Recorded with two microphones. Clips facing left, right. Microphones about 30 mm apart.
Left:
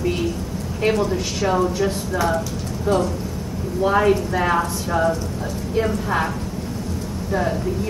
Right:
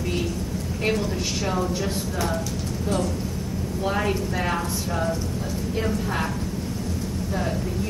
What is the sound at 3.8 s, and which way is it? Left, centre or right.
A woman's voice, centre.